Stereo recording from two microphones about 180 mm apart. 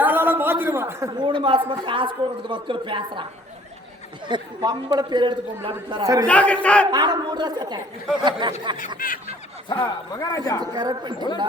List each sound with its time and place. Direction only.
0.0 s a sound: 10° right (ahead or behind)
1.2 s a man's voice: 25° right (ahead or behind)
4.3 s a man's voice: 25° right (ahead or behind)
6.2 s a man's voice: 5° left (ahead or behind)
6.9 s a man's voice: 25° right (ahead or behind)
9.0 s snicker: 50° left (ahead or behind)
9.6 s a man's voice: 25° left (ahead or behind)
10.6 s a man's voice: 20° right (ahead or behind)